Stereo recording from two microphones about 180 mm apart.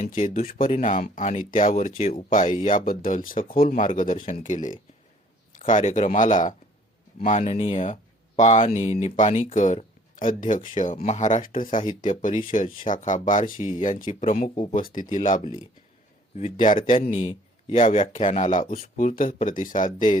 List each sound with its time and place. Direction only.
0.0 s speech: 45° left (ahead or behind)
14.5 s speech: 30° left (ahead or behind)
14.8 s speech: 50° left (ahead or behind); by 18.3 s 30° left (ahead or behind)
18.3 s speech: 45° left (ahead or behind)